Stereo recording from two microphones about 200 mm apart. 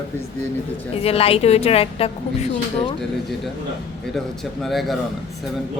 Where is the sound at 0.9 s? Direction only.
30° left (ahead or behind).